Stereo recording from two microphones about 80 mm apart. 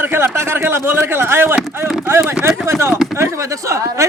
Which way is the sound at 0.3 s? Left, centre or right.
Right.